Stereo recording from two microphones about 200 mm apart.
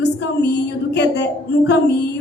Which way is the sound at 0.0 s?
55° left (ahead or behind).